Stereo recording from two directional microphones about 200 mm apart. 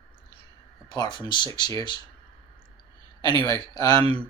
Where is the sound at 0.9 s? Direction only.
20° left (ahead or behind).